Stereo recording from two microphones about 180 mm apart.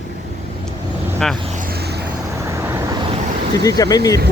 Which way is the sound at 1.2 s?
Centre (ahead or behind).